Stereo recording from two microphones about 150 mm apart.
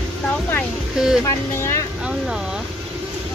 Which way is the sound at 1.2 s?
20° left (ahead or behind).